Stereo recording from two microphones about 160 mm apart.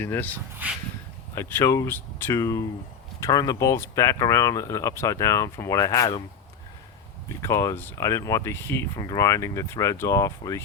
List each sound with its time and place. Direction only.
0.0 s speech: 10° left (ahead or behind)
1.4 s speech: 15° left (ahead or behind)
7.4 s speech: 20° left (ahead or behind)